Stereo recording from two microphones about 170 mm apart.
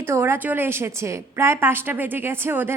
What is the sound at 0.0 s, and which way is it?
A woman's voice, 15° right (ahead or behind).